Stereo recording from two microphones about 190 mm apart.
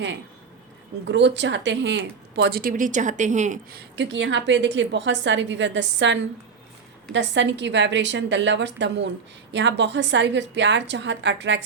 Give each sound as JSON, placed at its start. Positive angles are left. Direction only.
{"t": 1.0, "sound": "speech", "side_deg": -70}
{"t": 3.7, "sound": "a woman's voice", "side_deg": -60}